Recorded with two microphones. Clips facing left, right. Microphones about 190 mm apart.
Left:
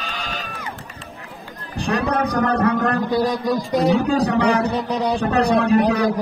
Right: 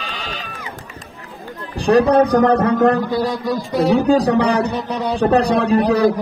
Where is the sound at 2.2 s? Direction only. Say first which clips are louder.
Right 6 dB; 60° right (ahead or behind).